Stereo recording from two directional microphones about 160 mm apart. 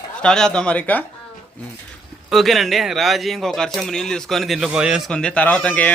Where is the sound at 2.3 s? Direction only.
Centre (ahead or behind).